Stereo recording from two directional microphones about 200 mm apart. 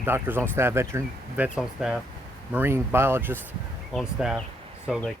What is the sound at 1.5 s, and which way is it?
Speech, centre (ahead or behind).